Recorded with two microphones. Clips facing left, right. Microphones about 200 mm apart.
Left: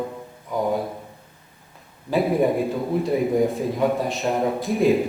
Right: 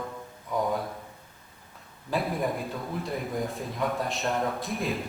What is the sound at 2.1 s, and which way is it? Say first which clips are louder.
Speech: left 9 dB; centre (ahead or behind).